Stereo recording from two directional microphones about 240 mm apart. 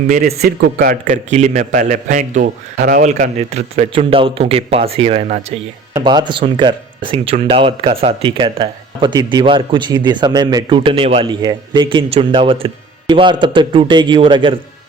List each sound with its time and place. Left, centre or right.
0.1 s speech: right